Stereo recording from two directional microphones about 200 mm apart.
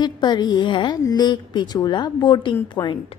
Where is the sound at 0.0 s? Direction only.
20° left (ahead or behind).